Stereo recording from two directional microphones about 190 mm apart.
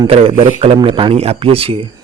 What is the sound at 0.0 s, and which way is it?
A man's voice, 30° right (ahead or behind).